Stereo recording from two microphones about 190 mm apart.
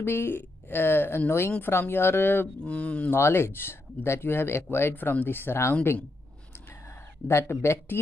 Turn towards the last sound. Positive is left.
turn(degrees=15)  # may be behind; listen again after turning